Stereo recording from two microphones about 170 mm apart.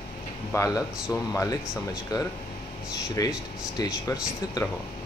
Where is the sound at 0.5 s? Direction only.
20° left (ahead or behind).